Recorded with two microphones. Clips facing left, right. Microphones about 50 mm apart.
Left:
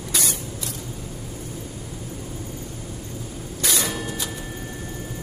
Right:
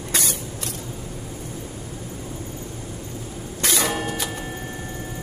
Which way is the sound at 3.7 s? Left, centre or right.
Right.